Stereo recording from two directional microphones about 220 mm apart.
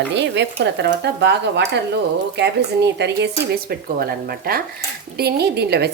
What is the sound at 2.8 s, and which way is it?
Speech, 50° right (ahead or behind).